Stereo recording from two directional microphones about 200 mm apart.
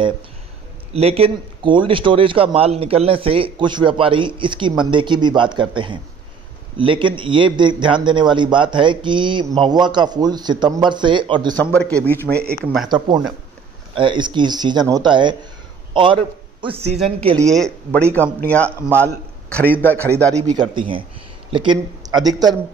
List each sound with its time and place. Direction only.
0.9 s a man's voice: 30° right (ahead or behind)
11.7 s speech: 5° left (ahead or behind)
13.9 s a man's voice: 25° right (ahead or behind)
17.5 s speech: centre (ahead or behind)
18.8 s a man's voice: 10° right (ahead or behind)
19.5 s speech: 10° left (ahead or behind)
20.2 s a man's voice: 20° right (ahead or behind)